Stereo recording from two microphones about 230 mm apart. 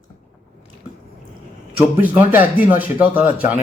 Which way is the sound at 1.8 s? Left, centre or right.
Centre.